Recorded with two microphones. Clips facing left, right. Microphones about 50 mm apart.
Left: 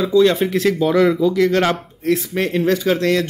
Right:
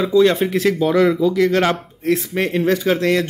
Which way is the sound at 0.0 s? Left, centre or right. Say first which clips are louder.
Even; centre.